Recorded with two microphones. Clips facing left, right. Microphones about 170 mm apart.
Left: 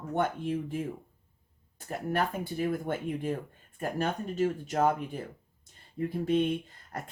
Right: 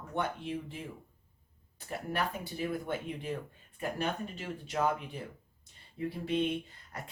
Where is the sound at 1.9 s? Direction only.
50° left (ahead or behind).